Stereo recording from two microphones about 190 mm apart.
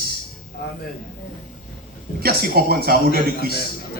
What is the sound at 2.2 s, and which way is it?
A man's voice, 55° right (ahead or behind).